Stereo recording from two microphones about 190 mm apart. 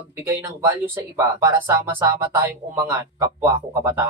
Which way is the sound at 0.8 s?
15° right (ahead or behind).